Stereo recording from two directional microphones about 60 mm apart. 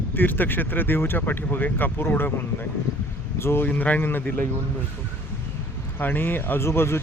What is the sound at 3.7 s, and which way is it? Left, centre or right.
Speech, left.